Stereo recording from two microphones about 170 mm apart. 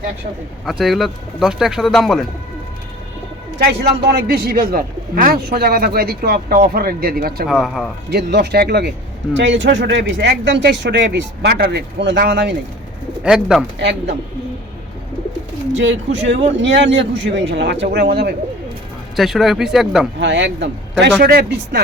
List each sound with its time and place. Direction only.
0.6 s a man's voice: centre (ahead or behind)
3.6 s a man's voice: 70° right (ahead or behind)
7.4 s a man's voice: centre (ahead or behind)
8.1 s speech: 80° right
9.3 s speech: 90° right
13.2 s a man's voice: 5° right (ahead or behind)
15.8 s speech: 90° right; by 18.3 s 70° right (ahead or behind)
19.1 s a man's voice: centre (ahead or behind)
20.1 s speech: 90° right
21.2 s speech: 65° right (ahead or behind)